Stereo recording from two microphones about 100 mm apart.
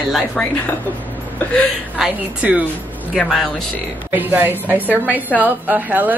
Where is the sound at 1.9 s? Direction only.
10° right (ahead or behind).